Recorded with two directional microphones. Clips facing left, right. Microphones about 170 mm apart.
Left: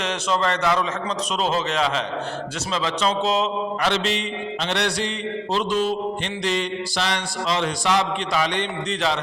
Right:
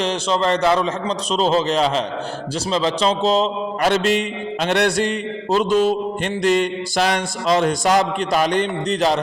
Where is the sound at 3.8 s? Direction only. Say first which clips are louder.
Right 8 dB; 50° right (ahead or behind).